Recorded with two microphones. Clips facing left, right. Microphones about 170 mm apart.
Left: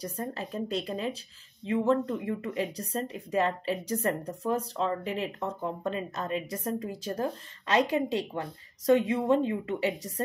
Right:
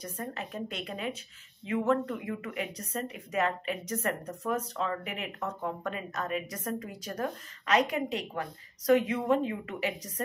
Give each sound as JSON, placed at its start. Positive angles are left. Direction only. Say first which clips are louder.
{"t": 0.0, "sound": "speech", "louder": "left 3 dB", "side_deg": 35}